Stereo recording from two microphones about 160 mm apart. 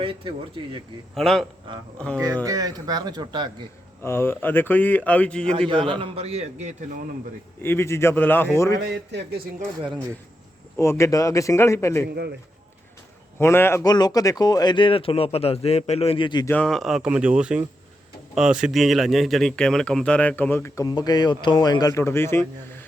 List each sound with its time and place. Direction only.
0.0 s a man's voice: 30° right (ahead or behind)
1.1 s speech: centre (ahead or behind)
1.7 s a man's voice: 30° right (ahead or behind)
4.0 s a man's voice: 15° left (ahead or behind)
5.6 s a man's voice: 30° right (ahead or behind)
7.6 s a man's voice: 15° left (ahead or behind)
10.8 s a man's voice: 15° left (ahead or behind)
12.0 s a man's voice: 90° right
13.4 s a man's voice: 15° left (ahead or behind)
16.5 s a man's voice: 5° left (ahead or behind)